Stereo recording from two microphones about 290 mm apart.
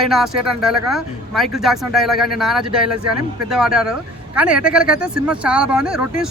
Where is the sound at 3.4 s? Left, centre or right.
Centre.